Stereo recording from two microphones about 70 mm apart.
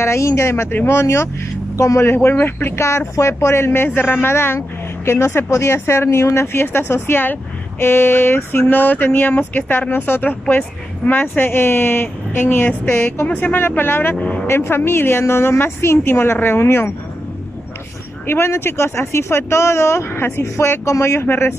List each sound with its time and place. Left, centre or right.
0.0 s speech: left
18.2 s speech: left
20.8 s speech: left